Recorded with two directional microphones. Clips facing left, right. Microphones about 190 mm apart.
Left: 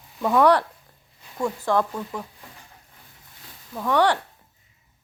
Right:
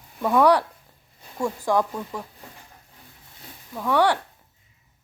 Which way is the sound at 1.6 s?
10° right (ahead or behind).